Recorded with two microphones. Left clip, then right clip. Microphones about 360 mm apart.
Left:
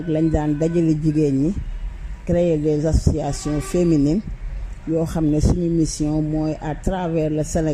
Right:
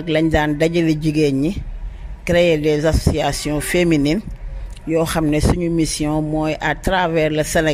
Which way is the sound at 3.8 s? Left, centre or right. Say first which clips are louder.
Right 2 dB; right.